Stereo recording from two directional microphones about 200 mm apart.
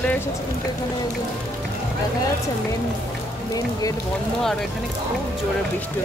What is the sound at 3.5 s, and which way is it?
Speech, 20° left (ahead or behind).